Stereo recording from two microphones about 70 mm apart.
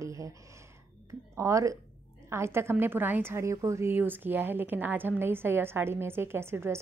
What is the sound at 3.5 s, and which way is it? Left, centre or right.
Speech, right.